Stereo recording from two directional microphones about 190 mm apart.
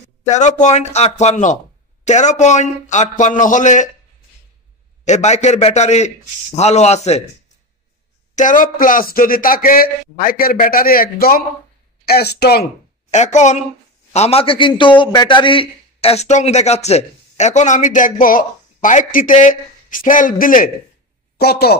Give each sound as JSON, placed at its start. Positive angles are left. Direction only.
{"t": 0.3, "sound": "a man's voice", "side_deg": 40}
{"t": 5.0, "sound": "a man's voice", "side_deg": 35}
{"t": 8.4, "sound": "a man's voice", "side_deg": 45}
{"t": 13.1, "sound": "a man's voice", "side_deg": 40}